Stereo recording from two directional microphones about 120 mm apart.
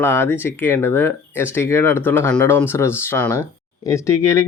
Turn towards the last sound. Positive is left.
turn(degrees=20)  # may be behind; listen again after turning